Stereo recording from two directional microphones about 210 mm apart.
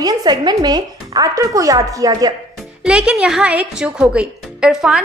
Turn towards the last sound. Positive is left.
turn(degrees=0)  # may be behind; listen again after turning